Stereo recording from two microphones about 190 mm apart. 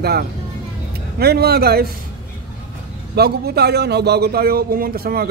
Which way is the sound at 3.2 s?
55° right (ahead or behind).